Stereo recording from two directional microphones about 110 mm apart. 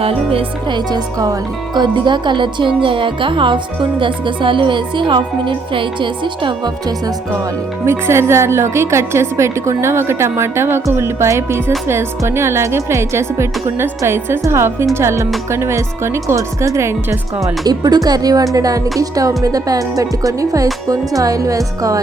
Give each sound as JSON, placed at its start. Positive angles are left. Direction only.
{"t": 0.0, "sound": "speech", "side_deg": -60}
{"t": 0.9, "sound": "speech", "side_deg": -35}
{"t": 7.9, "sound": "a woman's voice", "side_deg": -25}